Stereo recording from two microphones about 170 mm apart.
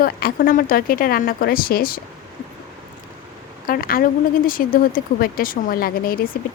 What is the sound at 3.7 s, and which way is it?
A woman's voice, 60° left (ahead or behind).